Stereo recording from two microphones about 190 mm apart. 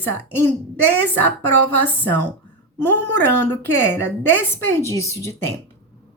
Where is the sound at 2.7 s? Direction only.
10° left (ahead or behind).